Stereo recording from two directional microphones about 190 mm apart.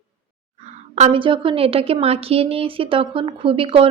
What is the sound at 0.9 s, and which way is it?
A woman's voice, 35° right (ahead or behind).